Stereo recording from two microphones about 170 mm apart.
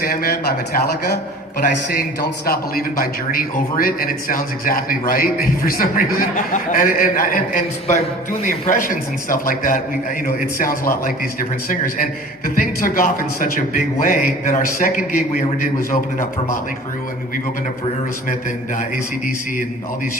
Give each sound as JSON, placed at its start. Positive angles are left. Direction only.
{"t": 0.0, "sound": "a man's voice", "side_deg": 60}